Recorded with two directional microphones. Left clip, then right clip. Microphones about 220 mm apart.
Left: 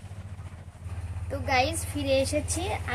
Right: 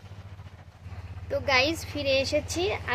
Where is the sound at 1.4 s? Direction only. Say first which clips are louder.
Right 1 dB; 40° right (ahead or behind).